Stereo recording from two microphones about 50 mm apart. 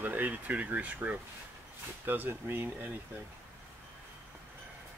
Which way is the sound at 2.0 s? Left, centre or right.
Right.